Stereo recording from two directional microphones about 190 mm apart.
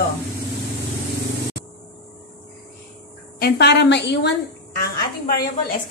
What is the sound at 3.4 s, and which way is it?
Speech, 60° left (ahead or behind).